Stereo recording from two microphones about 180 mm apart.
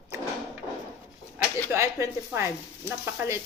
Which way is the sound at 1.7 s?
15° right (ahead or behind).